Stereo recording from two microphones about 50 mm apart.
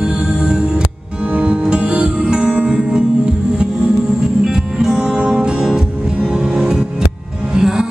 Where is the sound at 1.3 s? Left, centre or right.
Right.